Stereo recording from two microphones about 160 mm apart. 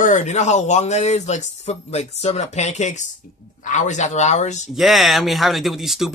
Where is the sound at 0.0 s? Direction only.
50° left (ahead or behind).